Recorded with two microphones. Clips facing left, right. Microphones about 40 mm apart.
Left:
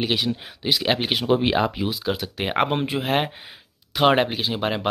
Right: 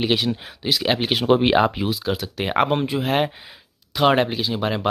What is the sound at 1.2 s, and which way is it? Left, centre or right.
Speech, right.